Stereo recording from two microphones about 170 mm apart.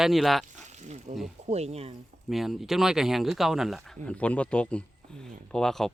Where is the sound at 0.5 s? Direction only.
45° right (ahead or behind).